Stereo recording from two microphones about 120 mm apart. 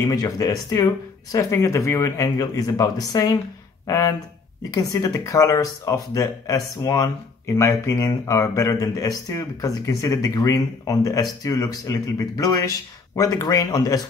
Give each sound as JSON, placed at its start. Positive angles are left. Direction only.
{"t": 0.0, "sound": "speech", "side_deg": 30}